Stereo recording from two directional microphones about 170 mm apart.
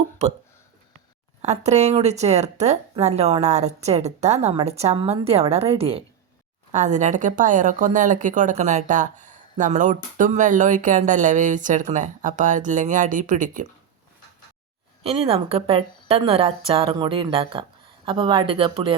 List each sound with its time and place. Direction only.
0.2 s a woman's voice: 40° right (ahead or behind)
1.4 s a woman's voice: 40° right (ahead or behind)
6.7 s speech: 45° right (ahead or behind)
15.0 s a woman's voice: 35° right (ahead or behind)